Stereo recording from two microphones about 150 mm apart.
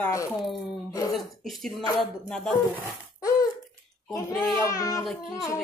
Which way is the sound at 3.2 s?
25° left (ahead or behind).